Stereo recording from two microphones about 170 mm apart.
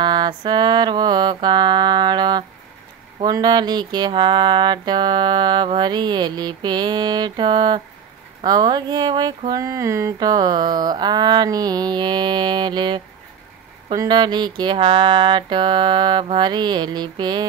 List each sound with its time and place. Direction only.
0.0 s mantra: 25° right (ahead or behind)